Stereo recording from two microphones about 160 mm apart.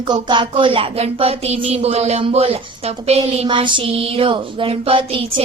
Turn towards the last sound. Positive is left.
turn(degrees=-35)  # may be behind; listen again after turning